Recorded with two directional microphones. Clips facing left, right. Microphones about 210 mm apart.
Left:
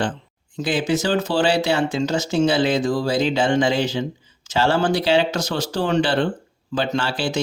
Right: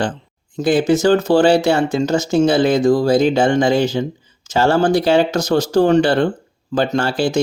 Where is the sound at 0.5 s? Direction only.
45° right (ahead or behind).